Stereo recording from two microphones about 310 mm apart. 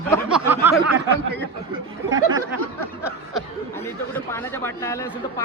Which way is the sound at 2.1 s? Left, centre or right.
Centre.